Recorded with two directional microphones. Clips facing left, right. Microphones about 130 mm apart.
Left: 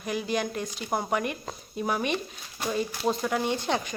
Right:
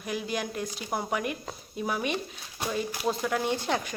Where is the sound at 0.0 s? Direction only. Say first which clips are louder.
Left 3 dB; centre (ahead or behind).